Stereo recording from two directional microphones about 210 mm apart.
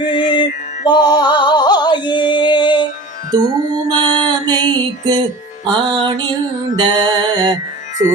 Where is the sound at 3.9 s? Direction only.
20° right (ahead or behind).